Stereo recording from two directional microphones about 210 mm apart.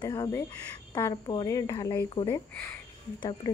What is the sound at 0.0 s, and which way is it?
Speech, 15° left (ahead or behind).